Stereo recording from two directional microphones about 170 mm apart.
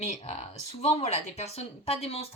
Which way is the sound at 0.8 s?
40° left (ahead or behind).